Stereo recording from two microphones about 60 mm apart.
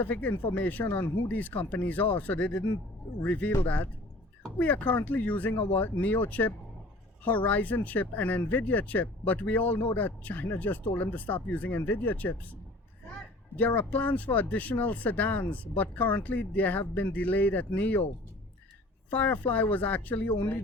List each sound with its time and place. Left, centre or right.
0.0 s speech: left
4.6 s speech: left
13.6 s speech: left
19.1 s speech: left